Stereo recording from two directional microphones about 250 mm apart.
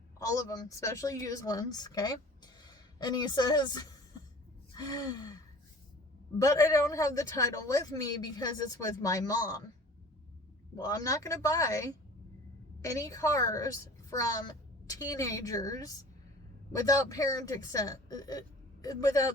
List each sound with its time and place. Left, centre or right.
0.2 s a woman's voice: centre
4.7 s gasp: centre
6.4 s a man's voice: centre
10.8 s a man's voice: centre